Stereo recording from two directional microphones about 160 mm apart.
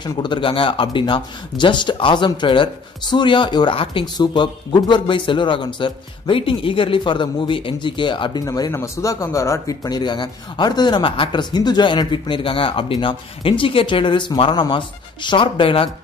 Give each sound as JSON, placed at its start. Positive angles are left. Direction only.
{"t": 0.0, "sound": "speech", "side_deg": 30}